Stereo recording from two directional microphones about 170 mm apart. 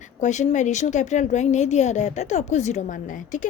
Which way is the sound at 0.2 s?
45° left (ahead or behind).